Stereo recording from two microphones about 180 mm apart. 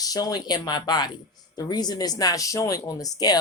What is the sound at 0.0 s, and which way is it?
Speech, 20° left (ahead or behind).